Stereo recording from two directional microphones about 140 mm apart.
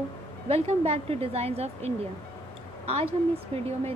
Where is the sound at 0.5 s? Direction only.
45° right (ahead or behind).